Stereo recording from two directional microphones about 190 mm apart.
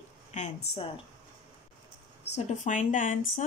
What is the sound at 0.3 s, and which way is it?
Speech, 35° left (ahead or behind).